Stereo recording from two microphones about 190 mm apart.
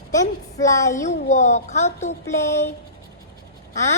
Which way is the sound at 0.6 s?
15° left (ahead or behind).